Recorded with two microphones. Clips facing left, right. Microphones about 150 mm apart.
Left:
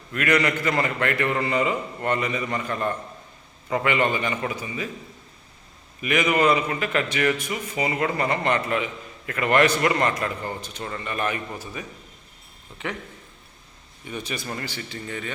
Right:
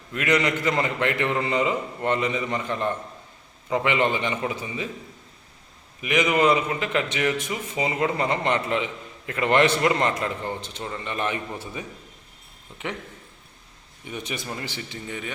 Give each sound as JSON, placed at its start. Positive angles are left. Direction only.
{"t": 0.1, "sound": "a man's voice", "side_deg": -20}
{"t": 6.0, "sound": "a man's voice", "side_deg": -20}
{"t": 14.1, "sound": "speech", "side_deg": -20}